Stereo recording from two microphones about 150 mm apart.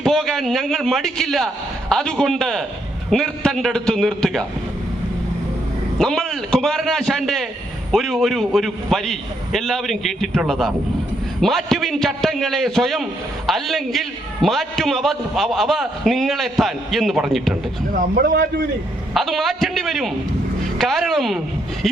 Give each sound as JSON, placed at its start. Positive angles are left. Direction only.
{"t": 0.0, "sound": "a man's voice", "side_deg": 5}
{"t": 6.0, "sound": "a man's voice", "side_deg": 5}
{"t": 18.1, "sound": "a man's voice", "side_deg": -75}
{"t": 19.1, "sound": "a man's voice", "side_deg": 0}